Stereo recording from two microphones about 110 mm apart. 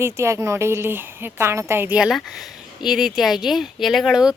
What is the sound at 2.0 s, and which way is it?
Speech, 5° right (ahead or behind).